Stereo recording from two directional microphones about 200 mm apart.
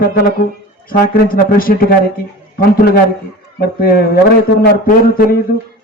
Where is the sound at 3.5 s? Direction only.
50° left (ahead or behind).